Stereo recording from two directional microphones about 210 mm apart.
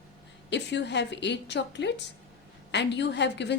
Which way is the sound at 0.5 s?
55° left (ahead or behind).